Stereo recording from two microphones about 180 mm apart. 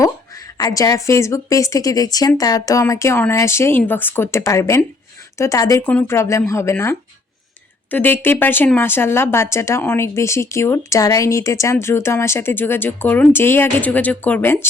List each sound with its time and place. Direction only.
0.5 s speech: 20° left (ahead or behind)
5.8 s speech: 10° left (ahead or behind)